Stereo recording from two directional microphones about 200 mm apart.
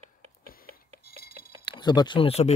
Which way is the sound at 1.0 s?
50° left (ahead or behind).